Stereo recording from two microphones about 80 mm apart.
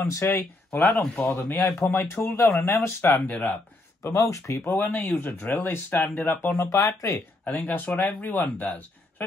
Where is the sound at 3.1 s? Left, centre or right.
Left.